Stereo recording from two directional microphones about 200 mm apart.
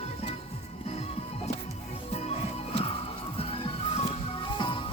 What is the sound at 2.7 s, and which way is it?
Music, 30° left (ahead or behind).